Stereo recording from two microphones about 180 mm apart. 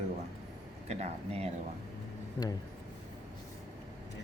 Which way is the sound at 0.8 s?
35° right (ahead or behind).